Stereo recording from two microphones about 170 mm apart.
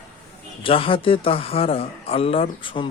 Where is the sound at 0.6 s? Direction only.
30° left (ahead or behind).